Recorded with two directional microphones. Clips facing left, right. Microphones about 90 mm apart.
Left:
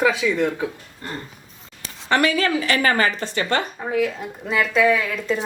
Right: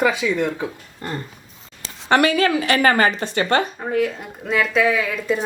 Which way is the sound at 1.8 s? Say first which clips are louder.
Right 3 dB; 60° right (ahead or behind).